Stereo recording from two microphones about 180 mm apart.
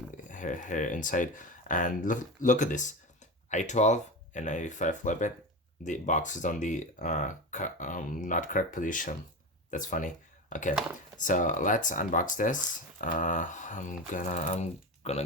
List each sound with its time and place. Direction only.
0.3 s speech: 45° left (ahead or behind)